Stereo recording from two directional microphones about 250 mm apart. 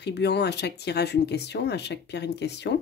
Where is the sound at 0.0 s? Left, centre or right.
Left.